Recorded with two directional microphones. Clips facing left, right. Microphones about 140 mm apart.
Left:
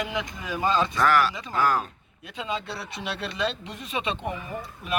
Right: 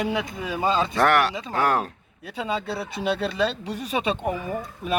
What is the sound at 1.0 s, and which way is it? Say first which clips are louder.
Speech: right 3 dB; 65° right (ahead or behind).